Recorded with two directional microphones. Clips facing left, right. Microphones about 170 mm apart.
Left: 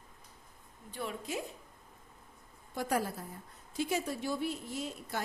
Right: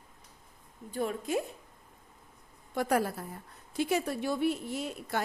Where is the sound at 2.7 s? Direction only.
65° right (ahead or behind).